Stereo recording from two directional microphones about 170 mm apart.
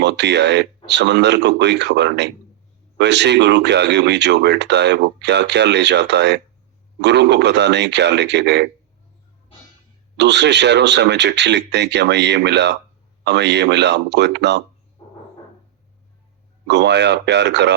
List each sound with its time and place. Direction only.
0.0 s speech: 90° right
10.2 s speech: 90° right
16.6 s speech: 90° right